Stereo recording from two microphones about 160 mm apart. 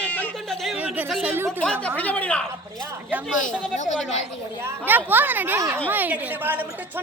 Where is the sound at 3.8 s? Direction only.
45° left (ahead or behind).